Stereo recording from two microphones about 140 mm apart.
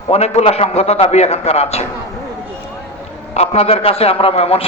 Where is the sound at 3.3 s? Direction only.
50° left (ahead or behind).